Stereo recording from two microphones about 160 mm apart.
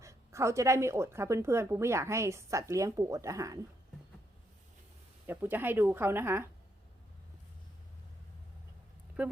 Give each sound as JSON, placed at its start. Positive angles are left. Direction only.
{"t": 0.0, "sound": "a woman's voice", "side_deg": -20}
{"t": 5.2, "sound": "a woman's voice", "side_deg": -15}